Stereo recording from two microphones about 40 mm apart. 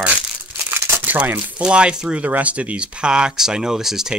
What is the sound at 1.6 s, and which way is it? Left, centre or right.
Speech, right.